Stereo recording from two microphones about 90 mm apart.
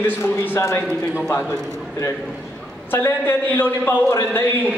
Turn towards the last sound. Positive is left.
turn(degrees=25)  # may be behind; listen again after turning